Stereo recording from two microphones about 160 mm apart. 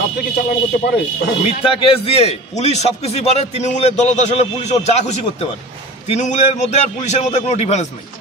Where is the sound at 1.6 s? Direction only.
35° left (ahead or behind).